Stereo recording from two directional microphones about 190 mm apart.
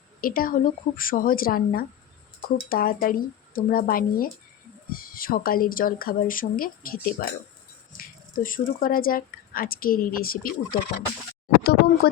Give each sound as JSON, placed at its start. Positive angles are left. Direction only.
{"t": 0.2, "sound": "speech", "side_deg": 50}